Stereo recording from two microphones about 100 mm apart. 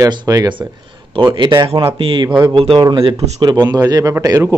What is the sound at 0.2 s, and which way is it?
A man's voice, 40° right (ahead or behind).